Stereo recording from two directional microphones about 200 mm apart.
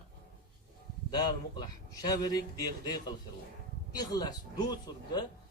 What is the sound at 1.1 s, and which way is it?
A man's voice, 20° left (ahead or behind).